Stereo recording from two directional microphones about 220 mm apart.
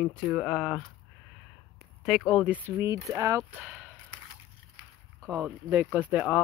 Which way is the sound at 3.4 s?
5° right (ahead or behind).